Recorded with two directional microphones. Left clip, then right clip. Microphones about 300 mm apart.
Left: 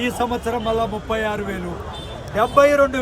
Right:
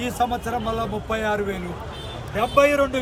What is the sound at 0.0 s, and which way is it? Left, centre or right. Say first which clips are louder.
Speech: left 2 dB; centre.